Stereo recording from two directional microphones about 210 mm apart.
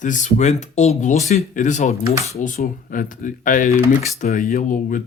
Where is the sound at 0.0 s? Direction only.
35° left (ahead or behind).